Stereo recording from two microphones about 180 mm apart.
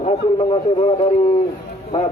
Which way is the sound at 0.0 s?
35° left (ahead or behind).